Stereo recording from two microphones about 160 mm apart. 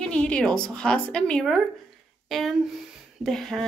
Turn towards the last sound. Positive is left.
turn(degrees=0)  # may be behind; listen again after turning